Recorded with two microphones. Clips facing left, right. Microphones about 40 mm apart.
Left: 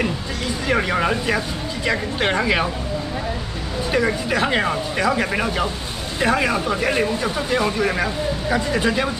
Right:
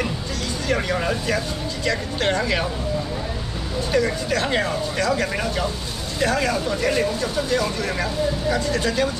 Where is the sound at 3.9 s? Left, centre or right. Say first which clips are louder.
Left 1 dB; centre.